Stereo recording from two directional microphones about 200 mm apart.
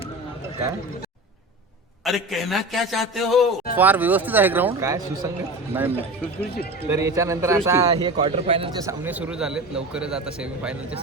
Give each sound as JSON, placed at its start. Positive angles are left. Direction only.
{"t": 2.0, "sound": "a man's voice", "side_deg": 0}
{"t": 7.9, "sound": "a man's voice", "side_deg": -25}
{"t": 8.8, "sound": "a man's voice", "side_deg": -10}